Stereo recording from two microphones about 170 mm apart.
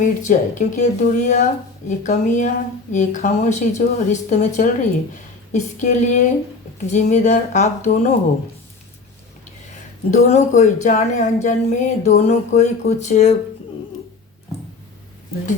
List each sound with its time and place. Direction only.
0.0 s speech: 45° left (ahead or behind)
10.1 s speech: 40° left (ahead or behind)